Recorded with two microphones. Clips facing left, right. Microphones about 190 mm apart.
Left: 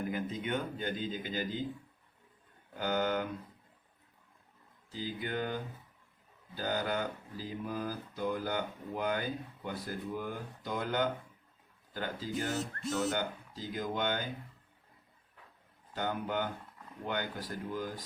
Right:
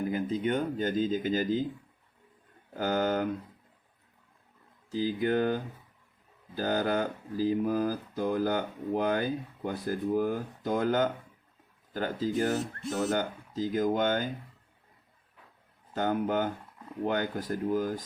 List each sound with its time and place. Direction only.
0.1 s speech: 35° right (ahead or behind)
2.7 s speech: 40° right (ahead or behind)
5.0 s speech: 45° right (ahead or behind)
6.6 s speech: 45° right (ahead or behind)
16.0 s speech: 45° right (ahead or behind)